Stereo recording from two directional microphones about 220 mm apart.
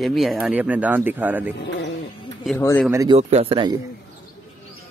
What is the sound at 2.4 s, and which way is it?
Speech, 10° left (ahead or behind).